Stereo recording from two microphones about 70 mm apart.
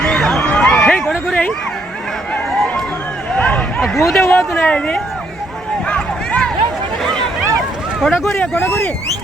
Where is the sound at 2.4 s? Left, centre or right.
Centre.